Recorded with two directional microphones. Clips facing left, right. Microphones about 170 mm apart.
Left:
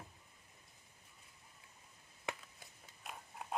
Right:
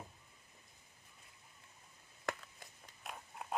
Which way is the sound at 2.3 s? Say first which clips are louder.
Right 3 dB; 5° left (ahead or behind).